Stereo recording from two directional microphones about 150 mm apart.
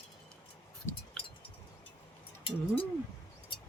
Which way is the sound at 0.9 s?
15° left (ahead or behind).